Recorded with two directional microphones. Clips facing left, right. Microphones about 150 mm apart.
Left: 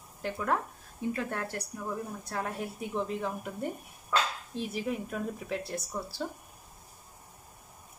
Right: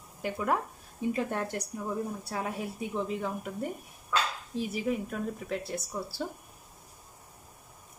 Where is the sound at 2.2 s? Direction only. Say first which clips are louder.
Right 1 dB; 5° right (ahead or behind).